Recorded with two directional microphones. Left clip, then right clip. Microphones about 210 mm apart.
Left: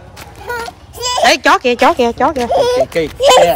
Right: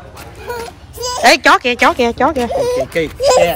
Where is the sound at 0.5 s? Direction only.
Centre (ahead or behind).